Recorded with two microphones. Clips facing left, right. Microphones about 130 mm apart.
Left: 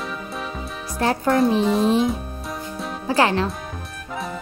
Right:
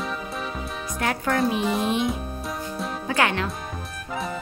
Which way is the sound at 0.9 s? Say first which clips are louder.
Left 6 dB; 30° left (ahead or behind).